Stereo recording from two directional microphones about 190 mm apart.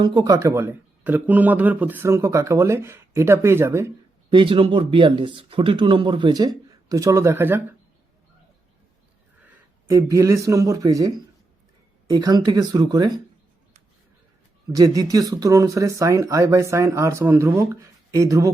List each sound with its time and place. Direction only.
0.0 s speech: 25° right (ahead or behind)
4.3 s speech: 25° right (ahead or behind)
9.4 s speech: 15° right (ahead or behind)
14.7 s speech: 20° right (ahead or behind)